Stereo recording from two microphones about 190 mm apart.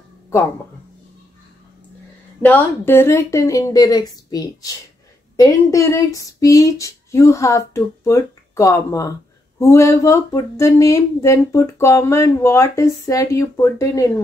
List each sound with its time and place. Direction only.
2.4 s speech: 10° left (ahead or behind)